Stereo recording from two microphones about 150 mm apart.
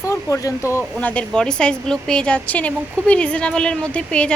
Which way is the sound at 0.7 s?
10° left (ahead or behind).